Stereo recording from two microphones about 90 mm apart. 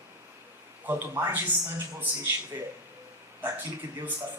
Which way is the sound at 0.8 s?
25° right (ahead or behind).